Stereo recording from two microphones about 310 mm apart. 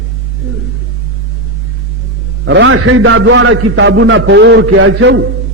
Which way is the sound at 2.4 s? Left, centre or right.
Right.